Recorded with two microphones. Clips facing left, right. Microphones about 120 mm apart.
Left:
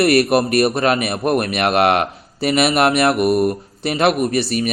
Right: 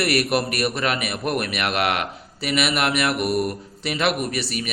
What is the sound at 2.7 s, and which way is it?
Speech, 30° left (ahead or behind).